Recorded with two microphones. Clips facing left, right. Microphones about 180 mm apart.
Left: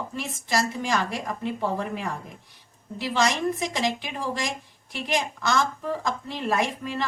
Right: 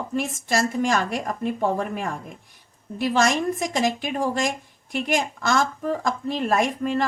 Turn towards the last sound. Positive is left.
turn(degrees=-50)  # may be behind; listen again after turning